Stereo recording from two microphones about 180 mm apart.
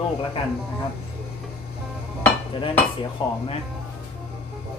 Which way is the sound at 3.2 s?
30° left (ahead or behind).